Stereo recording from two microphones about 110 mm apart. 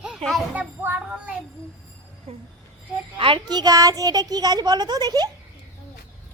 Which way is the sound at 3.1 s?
50° right (ahead or behind).